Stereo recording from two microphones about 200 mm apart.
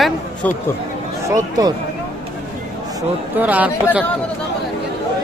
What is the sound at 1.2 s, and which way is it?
Speech, 20° right (ahead or behind).